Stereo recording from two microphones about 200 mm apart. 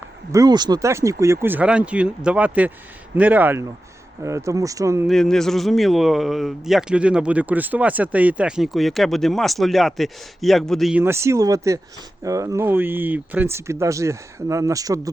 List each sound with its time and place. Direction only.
0.3 s speech: 20° right (ahead or behind)
5.0 s speech: centre (ahead or behind)
11.0 s speech: 15° right (ahead or behind)